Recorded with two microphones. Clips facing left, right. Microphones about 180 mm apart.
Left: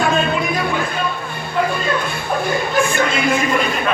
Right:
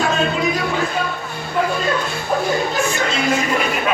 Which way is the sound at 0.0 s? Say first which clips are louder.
Left 1 dB; 55° left (ahead or behind).